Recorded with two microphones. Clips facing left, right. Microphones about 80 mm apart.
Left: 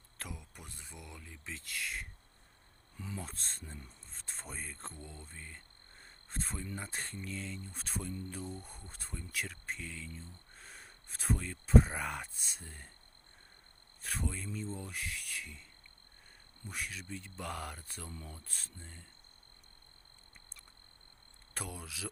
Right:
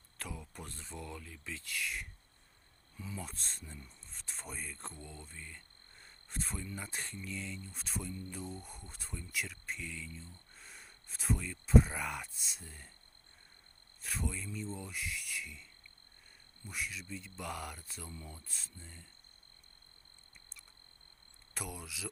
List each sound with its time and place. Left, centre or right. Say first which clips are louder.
0.3 s speech: right 6 dB; centre; by 2.0 s left
2.9 s speech: left 1 dB; left
3.2 s speech: even; left
5.3 s cricket: even; left
6.7 s speech: left 1 dB; left
14.0 s speech: left 1 dB; left
16.6 s speech: even; left
20.3 s a sound: even; left
21.5 s speech: even; left